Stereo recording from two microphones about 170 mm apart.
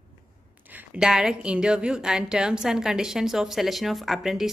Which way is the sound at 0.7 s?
5° right (ahead or behind).